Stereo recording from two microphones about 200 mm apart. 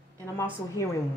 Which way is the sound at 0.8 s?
15° left (ahead or behind).